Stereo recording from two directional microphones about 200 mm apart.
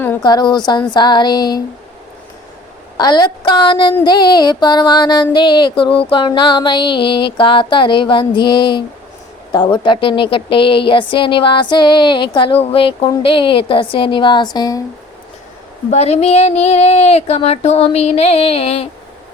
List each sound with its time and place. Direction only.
0.2 s a woman's voice: 20° left (ahead or behind)
3.0 s a woman's voice: 20° left (ahead or behind)
15.9 s speech: 35° left (ahead or behind)